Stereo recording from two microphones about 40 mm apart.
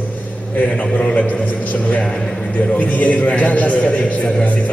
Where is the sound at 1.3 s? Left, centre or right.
Left.